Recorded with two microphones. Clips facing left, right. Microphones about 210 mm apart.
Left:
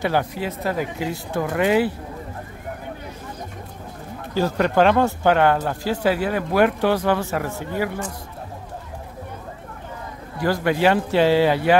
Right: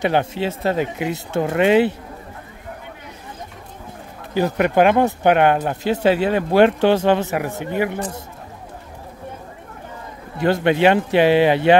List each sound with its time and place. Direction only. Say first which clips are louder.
0.0 s speech: right 3 dB; 25° right (ahead or behind)
4.3 s speech: right 2 dB; 15° right (ahead or behind)
10.3 s speech: right 4 dB; 25° right (ahead or behind)